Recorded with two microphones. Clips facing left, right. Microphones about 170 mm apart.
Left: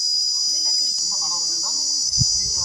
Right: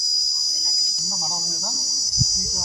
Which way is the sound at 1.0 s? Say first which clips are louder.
Right 5 dB; 60° right (ahead or behind).